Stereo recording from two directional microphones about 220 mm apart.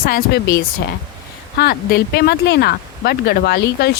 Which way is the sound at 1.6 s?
45° left (ahead or behind).